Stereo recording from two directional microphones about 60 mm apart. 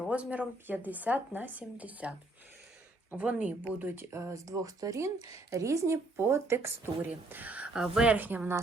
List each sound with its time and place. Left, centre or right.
0.1 s speech: right
3.8 s speech: right
4.9 s speech: right
7.0 s speech: right
7.7 s speech: centre
8.0 s speech: right